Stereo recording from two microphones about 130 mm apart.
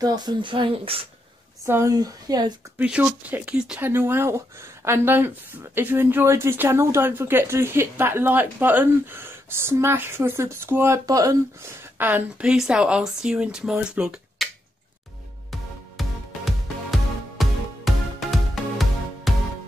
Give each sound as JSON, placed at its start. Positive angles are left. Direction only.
{"t": 0.0, "sound": "speech", "side_deg": -30}
{"t": 1.7, "sound": "speech", "side_deg": -25}
{"t": 2.8, "sound": "speech", "side_deg": -10}
{"t": 12.0, "sound": "speech", "side_deg": -15}
{"t": 15.5, "sound": "music", "side_deg": 0}